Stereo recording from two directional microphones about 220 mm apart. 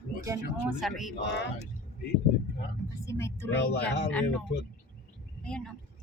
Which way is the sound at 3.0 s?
10° left (ahead or behind).